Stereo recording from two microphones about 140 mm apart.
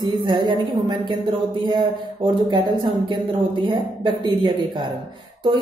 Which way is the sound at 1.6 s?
30° right (ahead or behind).